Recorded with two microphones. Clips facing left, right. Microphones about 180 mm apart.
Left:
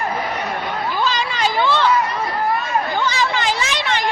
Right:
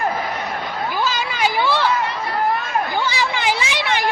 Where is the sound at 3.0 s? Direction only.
10° right (ahead or behind).